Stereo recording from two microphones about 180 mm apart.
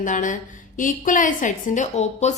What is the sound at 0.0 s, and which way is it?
A woman's voice, 45° left (ahead or behind).